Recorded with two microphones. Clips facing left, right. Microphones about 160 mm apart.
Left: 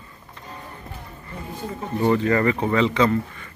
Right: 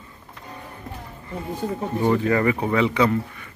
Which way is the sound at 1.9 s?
5° right (ahead or behind).